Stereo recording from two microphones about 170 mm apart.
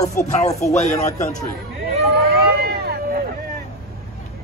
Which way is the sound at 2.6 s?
65° right (ahead or behind).